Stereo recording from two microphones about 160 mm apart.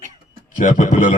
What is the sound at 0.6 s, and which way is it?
Music, 50° left (ahead or behind).